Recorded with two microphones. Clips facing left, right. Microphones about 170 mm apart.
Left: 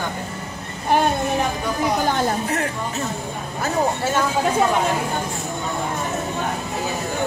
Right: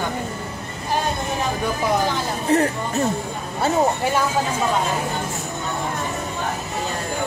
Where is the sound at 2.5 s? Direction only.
30° right (ahead or behind).